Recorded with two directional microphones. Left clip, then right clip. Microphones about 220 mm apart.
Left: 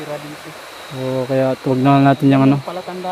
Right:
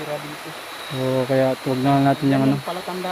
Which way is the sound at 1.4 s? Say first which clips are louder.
Left 5 dB; 50° left (ahead or behind).